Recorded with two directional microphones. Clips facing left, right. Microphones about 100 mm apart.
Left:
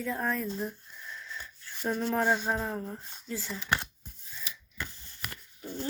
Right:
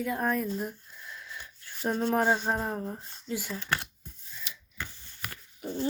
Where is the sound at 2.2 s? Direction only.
15° right (ahead or behind).